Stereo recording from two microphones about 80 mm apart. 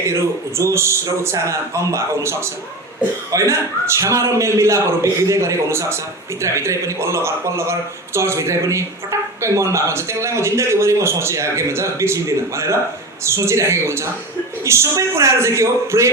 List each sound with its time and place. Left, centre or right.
0.1 s a man's voice: right